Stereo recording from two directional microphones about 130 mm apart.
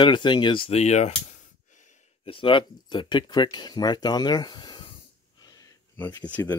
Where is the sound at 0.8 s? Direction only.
60° left (ahead or behind).